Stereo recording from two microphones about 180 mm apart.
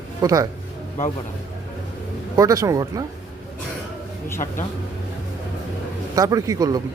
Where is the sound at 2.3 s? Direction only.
20° right (ahead or behind).